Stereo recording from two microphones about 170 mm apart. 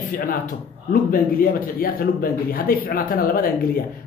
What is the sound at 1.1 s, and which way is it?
Speech, 60° left (ahead or behind).